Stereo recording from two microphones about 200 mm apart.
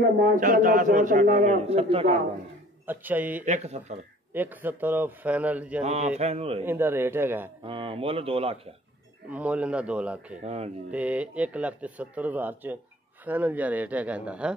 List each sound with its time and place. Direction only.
0.4 s a man's voice: 40° right (ahead or behind)
2.9 s speech: 10° right (ahead or behind)
3.4 s a man's voice: 35° right (ahead or behind)
4.3 s speech: 10° right (ahead or behind)
5.8 s a man's voice: 35° right (ahead or behind)
6.6 s speech: 10° right (ahead or behind)
7.6 s speech: 25° right (ahead or behind)
9.3 s speech: 5° right (ahead or behind)
10.4 s a man's voice: 30° right (ahead or behind)
10.9 s speech: 5° right (ahead or behind)